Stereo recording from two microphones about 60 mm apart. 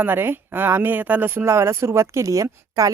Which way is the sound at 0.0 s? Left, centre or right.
Right.